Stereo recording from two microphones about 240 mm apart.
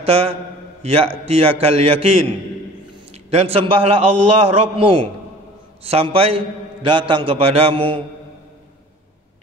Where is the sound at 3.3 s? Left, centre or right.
Right.